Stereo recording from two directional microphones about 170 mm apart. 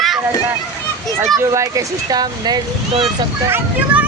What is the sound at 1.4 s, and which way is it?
Speech, 20° right (ahead or behind).